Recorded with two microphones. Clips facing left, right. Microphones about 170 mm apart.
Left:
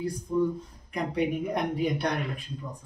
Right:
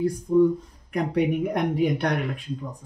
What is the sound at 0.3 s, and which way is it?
Speech, 45° right (ahead or behind).